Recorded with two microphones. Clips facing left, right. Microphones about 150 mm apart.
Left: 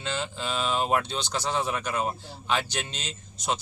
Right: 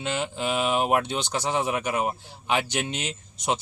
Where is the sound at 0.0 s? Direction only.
15° right (ahead or behind).